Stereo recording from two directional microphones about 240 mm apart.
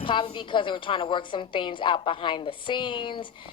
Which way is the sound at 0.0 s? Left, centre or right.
Centre.